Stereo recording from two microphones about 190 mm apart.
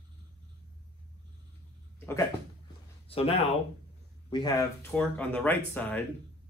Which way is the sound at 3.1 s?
30° left (ahead or behind).